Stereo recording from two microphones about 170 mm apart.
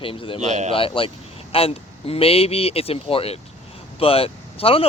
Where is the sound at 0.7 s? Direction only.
30° left (ahead or behind).